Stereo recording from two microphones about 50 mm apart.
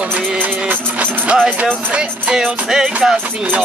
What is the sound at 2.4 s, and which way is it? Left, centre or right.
Music, centre.